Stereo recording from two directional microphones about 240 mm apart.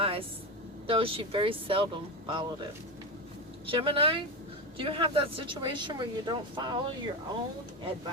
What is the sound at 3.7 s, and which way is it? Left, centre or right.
Speech, right.